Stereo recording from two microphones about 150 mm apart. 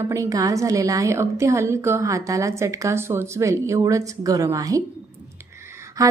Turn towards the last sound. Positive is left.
turn(degrees=-25)  # may be behind; listen again after turning